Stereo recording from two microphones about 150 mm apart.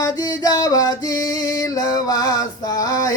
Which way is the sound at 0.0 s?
25° left (ahead or behind).